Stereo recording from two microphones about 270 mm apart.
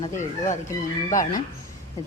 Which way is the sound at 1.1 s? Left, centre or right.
Left.